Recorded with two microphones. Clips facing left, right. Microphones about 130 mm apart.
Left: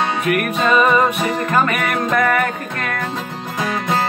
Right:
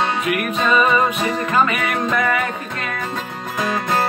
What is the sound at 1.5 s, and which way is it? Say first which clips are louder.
Music: even; 50° left (ahead or behind).